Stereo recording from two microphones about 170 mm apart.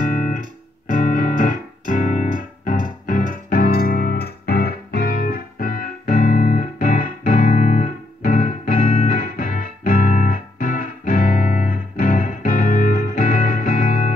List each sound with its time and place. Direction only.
1.1 s music: 50° left (ahead or behind)